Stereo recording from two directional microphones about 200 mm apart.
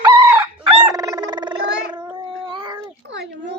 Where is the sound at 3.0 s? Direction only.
60° right (ahead or behind).